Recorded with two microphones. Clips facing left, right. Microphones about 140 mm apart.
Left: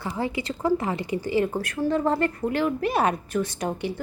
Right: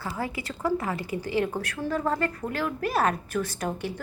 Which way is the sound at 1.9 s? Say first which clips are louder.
Left 3 dB; 25° left (ahead or behind).